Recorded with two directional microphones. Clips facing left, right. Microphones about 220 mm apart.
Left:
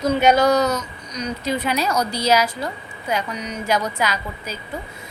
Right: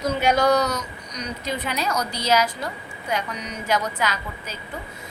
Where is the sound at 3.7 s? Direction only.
10° left (ahead or behind).